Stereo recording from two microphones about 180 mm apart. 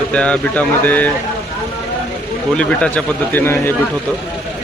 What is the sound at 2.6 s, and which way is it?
A man's voice, 5° left (ahead or behind).